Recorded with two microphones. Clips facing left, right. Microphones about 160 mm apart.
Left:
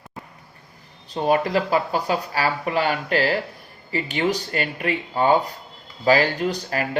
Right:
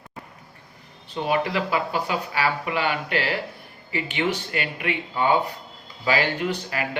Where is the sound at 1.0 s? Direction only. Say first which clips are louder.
Left 4 dB; 40° left (ahead or behind).